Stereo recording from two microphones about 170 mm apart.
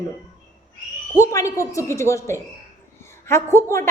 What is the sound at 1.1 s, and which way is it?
A woman's voice, 15° left (ahead or behind).